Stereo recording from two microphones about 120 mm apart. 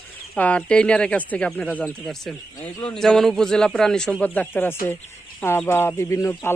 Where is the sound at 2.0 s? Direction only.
Centre (ahead or behind).